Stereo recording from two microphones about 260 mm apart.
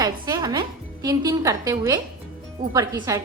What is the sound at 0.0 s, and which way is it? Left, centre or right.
Music, centre.